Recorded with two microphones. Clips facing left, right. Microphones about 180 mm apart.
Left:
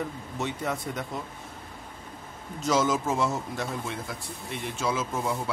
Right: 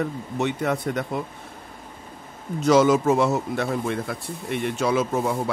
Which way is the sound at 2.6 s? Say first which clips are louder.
Right 8 dB; 65° right (ahead or behind).